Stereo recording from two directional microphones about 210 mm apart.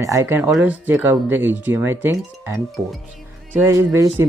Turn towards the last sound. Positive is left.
turn(degrees=-15)  # may be behind; listen again after turning